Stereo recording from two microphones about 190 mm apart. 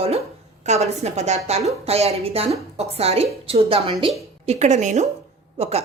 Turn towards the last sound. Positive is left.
turn(degrees=-35)  # may be behind; listen again after turning